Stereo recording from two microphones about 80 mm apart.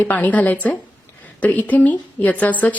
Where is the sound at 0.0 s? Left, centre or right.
Centre.